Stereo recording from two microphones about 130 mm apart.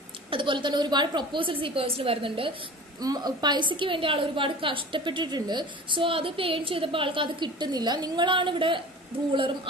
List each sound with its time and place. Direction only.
0.3 s a woman's voice: 40° right (ahead or behind)
3.0 s a woman's voice: 30° right (ahead or behind)